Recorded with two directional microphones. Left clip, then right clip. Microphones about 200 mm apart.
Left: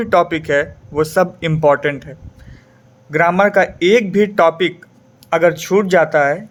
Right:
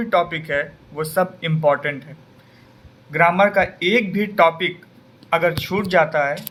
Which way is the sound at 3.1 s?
55° left (ahead or behind).